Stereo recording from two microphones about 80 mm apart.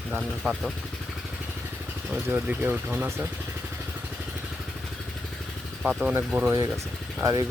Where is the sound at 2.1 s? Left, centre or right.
Right.